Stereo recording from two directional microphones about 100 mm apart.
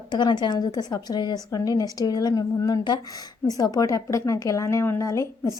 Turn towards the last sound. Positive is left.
turn(degrees=30)  # may be behind; listen again after turning